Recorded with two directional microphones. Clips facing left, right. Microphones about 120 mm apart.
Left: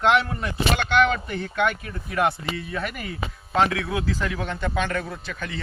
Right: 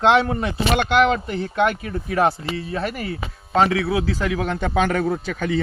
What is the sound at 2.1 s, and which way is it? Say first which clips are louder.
Speech: right 4 dB; 30° right (ahead or behind).